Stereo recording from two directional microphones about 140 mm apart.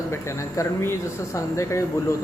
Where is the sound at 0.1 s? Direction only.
20° left (ahead or behind).